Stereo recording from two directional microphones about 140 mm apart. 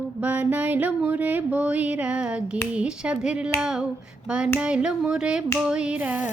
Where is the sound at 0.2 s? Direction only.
10° right (ahead or behind).